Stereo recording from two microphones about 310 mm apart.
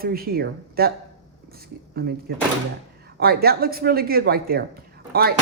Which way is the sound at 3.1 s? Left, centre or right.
Right.